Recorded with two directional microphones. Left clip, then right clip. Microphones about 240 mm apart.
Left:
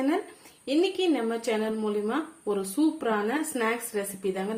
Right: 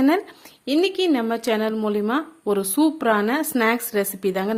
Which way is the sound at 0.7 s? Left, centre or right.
Right.